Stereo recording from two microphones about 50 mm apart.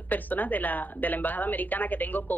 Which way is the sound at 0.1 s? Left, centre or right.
Left.